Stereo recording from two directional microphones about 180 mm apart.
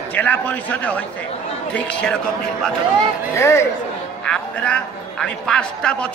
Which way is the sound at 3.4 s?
15° left (ahead or behind).